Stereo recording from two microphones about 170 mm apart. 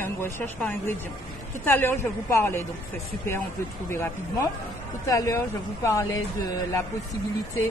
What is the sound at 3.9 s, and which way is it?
Speech, 15° left (ahead or behind).